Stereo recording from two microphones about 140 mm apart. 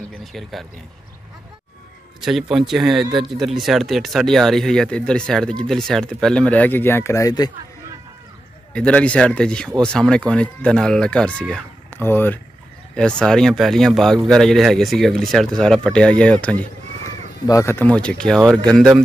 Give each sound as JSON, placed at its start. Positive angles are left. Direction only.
{"t": 0.2, "sound": "speech", "side_deg": 0}
{"t": 2.2, "sound": "speech", "side_deg": -5}
{"t": 8.7, "sound": "speech", "side_deg": 10}
{"t": 17.5, "sound": "speech", "side_deg": 20}